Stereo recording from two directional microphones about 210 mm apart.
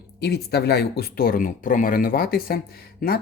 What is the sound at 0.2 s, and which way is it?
Speech, 50° left (ahead or behind).